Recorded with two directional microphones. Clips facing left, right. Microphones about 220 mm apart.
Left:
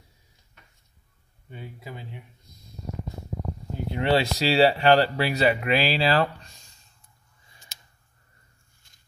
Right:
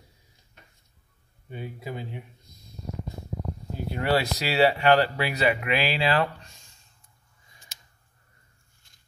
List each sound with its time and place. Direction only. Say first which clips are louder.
1.5 s speech: right 5 dB; 15° right (ahead or behind)
3.9 s speech: left 2 dB; 25° left (ahead or behind)